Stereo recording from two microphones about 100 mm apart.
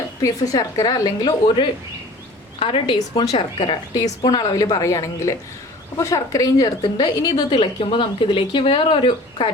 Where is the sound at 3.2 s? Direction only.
40° left (ahead or behind).